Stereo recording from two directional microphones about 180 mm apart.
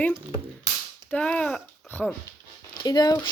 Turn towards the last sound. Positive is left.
turn(degrees=20)  # may be behind; listen again after turning